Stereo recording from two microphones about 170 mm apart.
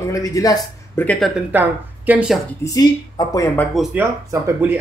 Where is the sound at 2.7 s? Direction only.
20° left (ahead or behind).